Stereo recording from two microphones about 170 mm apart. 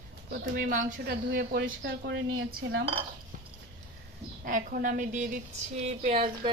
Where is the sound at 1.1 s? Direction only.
80° right.